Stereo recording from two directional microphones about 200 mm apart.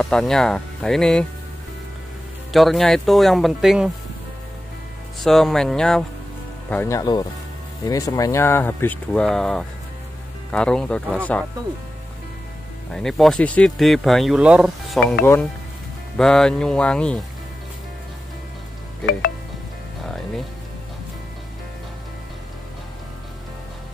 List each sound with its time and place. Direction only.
0.0 s speech: 5° left (ahead or behind)
2.5 s speech: centre (ahead or behind)
5.2 s speech: centre (ahead or behind)
6.7 s speech: 10° left (ahead or behind)
12.9 s speech: centre (ahead or behind)
16.2 s speech: 5° left (ahead or behind)